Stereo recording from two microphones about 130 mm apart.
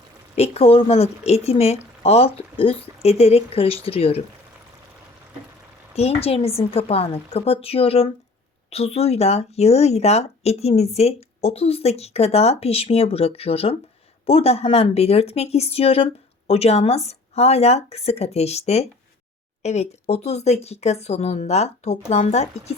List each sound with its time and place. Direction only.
0.3 s speech: 55° left (ahead or behind)
5.9 s a woman's voice: 50° left (ahead or behind)